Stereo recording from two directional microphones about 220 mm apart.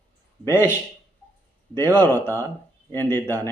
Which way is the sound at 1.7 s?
10° left (ahead or behind).